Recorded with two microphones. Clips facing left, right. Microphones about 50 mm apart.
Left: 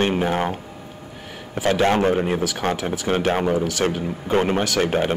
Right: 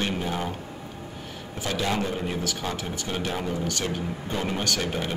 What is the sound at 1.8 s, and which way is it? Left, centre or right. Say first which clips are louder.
Speech: left 9 dB; left.